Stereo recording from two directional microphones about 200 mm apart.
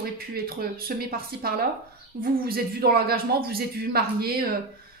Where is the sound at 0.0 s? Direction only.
50° right (ahead or behind).